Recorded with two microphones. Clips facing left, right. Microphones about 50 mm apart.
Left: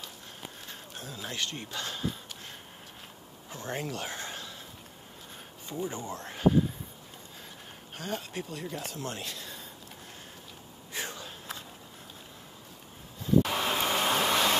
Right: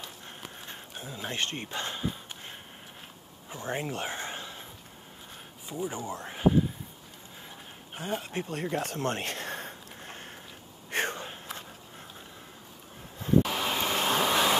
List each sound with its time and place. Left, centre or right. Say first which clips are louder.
0.9 s speech: right 3 dB; right
3.4 s speech: right 2 dB; right
5.7 s speech: right 1 dB; centre
8.0 s speech: right 3 dB; right
10.9 s a sound: right 7 dB; right
13.4 s vehicle: left 2 dB; centre